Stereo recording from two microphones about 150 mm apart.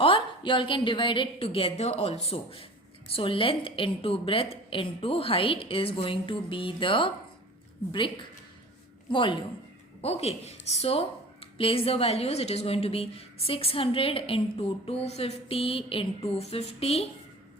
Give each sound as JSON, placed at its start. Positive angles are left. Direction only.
{"t": 0.0, "sound": "a woman's voice", "side_deg": 35}
{"t": 9.1, "sound": "a woman's voice", "side_deg": 35}